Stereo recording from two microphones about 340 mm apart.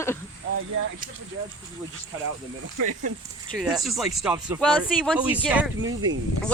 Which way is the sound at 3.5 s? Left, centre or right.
Centre.